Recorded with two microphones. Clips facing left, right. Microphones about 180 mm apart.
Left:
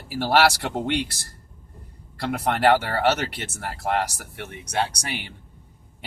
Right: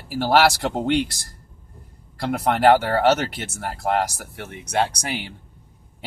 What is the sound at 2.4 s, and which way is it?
Speech, 50° right (ahead or behind).